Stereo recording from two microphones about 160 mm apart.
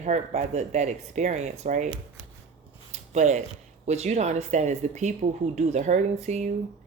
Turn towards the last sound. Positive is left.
turn(degrees=-50)  # may be behind; listen again after turning